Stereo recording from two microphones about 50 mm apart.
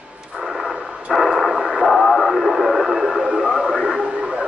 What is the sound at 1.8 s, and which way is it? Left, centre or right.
Radio, centre.